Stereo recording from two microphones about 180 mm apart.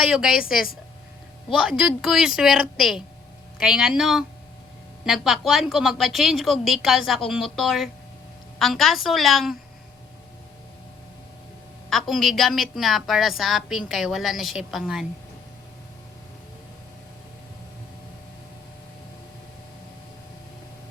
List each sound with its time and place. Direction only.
0.1 s a woman's voice: 5° right (ahead or behind)
11.9 s a woman's voice: centre (ahead or behind)